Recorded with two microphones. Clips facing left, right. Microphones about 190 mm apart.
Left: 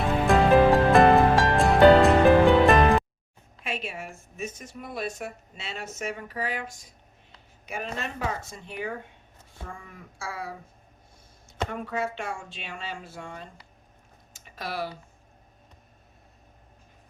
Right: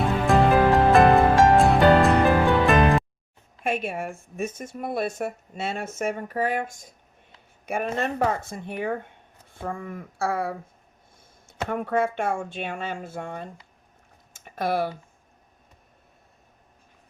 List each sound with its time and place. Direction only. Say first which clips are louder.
0.0 s music: right 1 dB; centre (ahead or behind)
3.6 s a woman's voice: right 7 dB; 50° right (ahead or behind)
11.7 s a woman's voice: right 9 dB; 55° right (ahead or behind)
14.3 s a sound: right 8 dB; 55° right (ahead or behind)